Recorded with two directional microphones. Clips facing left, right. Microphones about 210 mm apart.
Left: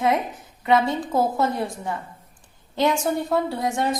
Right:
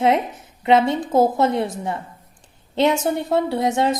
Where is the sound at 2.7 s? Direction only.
25° right (ahead or behind).